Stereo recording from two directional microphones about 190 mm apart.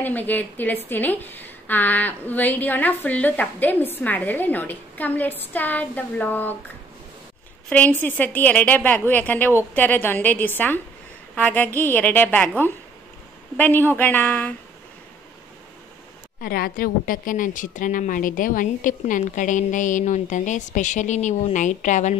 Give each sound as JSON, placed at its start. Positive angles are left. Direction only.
{"t": 0.0, "sound": "a woman's voice", "side_deg": 10}
{"t": 7.7, "sound": "a woman's voice", "side_deg": 10}
{"t": 16.3, "sound": "a woman's voice", "side_deg": 50}